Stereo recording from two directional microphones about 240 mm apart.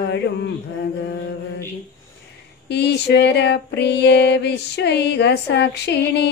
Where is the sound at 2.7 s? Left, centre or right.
Left.